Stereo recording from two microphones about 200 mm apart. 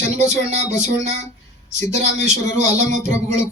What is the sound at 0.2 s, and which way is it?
Speech, 35° right (ahead or behind).